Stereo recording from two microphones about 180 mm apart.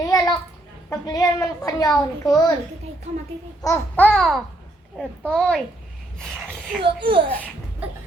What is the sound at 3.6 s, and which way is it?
A child's voice, 15° left (ahead or behind).